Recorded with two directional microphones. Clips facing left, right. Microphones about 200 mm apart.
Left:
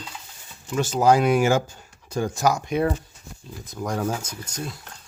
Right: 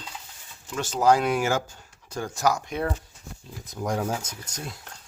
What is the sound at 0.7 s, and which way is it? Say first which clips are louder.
Speech: left 3 dB; 10° left (ahead or behind).